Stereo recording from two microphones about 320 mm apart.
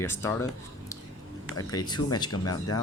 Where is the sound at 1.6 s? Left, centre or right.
Centre.